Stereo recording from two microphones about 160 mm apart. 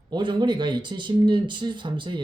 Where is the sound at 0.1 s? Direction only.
30° right (ahead or behind).